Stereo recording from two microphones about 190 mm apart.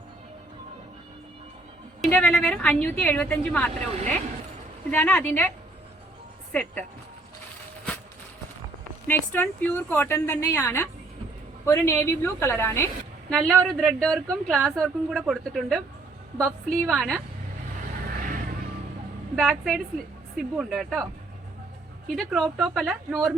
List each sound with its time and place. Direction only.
2.0 s a woman's voice: 5° left (ahead or behind)
4.9 s a woman's voice: 10° left (ahead or behind)
6.5 s a woman's voice: 5° left (ahead or behind)
9.0 s a woman's voice: 10° left (ahead or behind)
16.8 s a woman's voice: centre (ahead or behind)
18.0 s vehicle: 45° right (ahead or behind)
19.4 s a woman's voice: centre (ahead or behind)
22.1 s a woman's voice: centre (ahead or behind)